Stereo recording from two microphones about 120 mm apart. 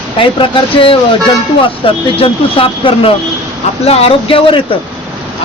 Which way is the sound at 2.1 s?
50° left (ahead or behind).